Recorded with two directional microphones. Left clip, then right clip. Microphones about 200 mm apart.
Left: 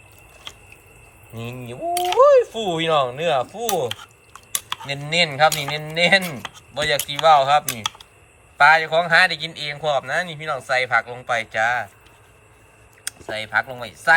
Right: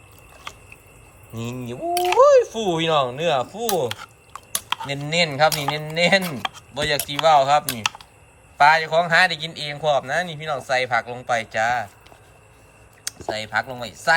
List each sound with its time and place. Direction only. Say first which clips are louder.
1.3 s a man's voice: right 2 dB; 10° right (ahead or behind)
4.9 s a man's voice: left 2 dB; 5° right (ahead or behind)
13.1 s speech: even; 5° right (ahead or behind)